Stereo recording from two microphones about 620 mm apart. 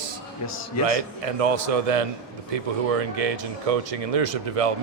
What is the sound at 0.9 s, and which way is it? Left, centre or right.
Speech, right.